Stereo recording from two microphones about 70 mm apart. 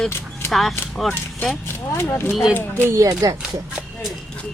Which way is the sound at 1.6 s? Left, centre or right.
Left.